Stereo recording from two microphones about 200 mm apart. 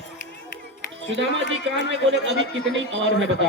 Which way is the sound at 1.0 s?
70° right (ahead or behind).